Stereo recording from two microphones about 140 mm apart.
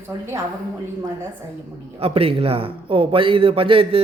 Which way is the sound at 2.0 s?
45° right (ahead or behind).